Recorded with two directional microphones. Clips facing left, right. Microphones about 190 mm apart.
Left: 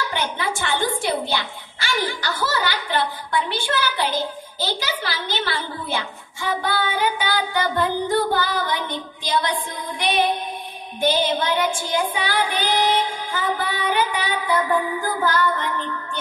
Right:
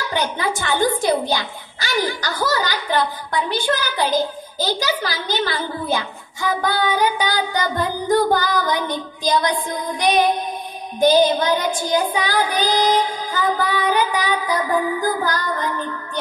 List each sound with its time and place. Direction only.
0.1 s child singing: 40° right (ahead or behind)
1.3 s a child's voice: 40° right (ahead or behind)
2.2 s child singing: 40° right (ahead or behind)